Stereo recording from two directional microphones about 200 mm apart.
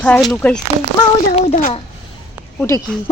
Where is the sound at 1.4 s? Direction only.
35° left (ahead or behind).